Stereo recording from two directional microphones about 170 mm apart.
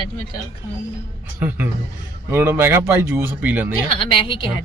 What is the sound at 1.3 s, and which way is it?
Speech, 10° right (ahead or behind).